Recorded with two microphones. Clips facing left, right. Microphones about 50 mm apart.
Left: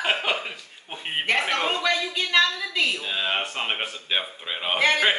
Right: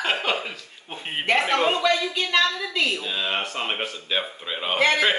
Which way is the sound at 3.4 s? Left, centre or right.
Left.